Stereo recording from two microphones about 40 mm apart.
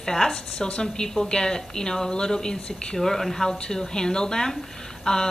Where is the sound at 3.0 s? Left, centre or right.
Centre.